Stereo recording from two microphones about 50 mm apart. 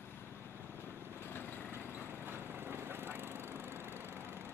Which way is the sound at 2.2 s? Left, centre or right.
Right.